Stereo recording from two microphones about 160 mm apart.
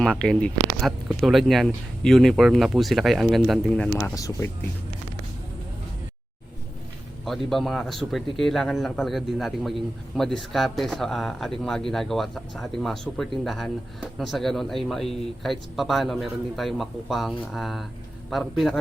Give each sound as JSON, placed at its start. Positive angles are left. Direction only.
{"t": 0.0, "sound": "speech", "side_deg": 5}
{"t": 3.9, "sound": "speech", "side_deg": 20}
{"t": 7.3, "sound": "speech", "side_deg": 0}